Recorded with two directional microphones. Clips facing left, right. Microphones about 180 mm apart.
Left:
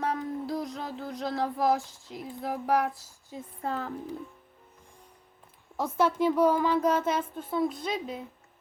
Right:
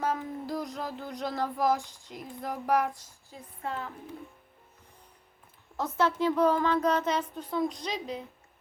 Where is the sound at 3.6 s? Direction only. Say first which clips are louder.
Left 3 dB; 40° left (ahead or behind).